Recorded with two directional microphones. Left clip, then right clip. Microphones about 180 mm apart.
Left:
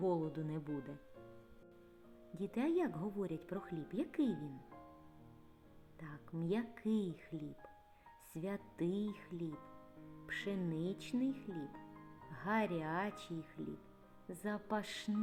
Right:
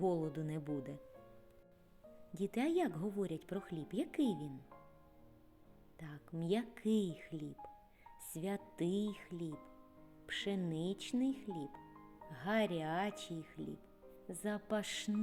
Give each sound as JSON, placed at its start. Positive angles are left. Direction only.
{"t": 0.0, "sound": "speech", "side_deg": -30}
{"t": 2.3, "sound": "speech", "side_deg": -35}
{"t": 6.0, "sound": "speech", "side_deg": -35}